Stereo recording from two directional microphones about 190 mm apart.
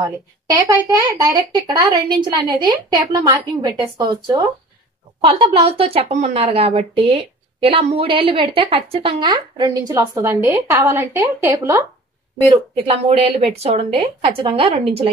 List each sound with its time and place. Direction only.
0.0 s a woman's voice: 15° right (ahead or behind)
12.7 s speech: 30° right (ahead or behind)